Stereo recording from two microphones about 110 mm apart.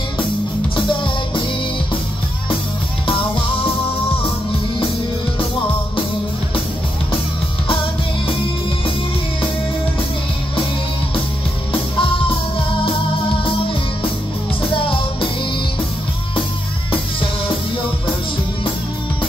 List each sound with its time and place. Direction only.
7.6 s music: 55° left (ahead or behind)
12.0 s music: 55° left (ahead or behind)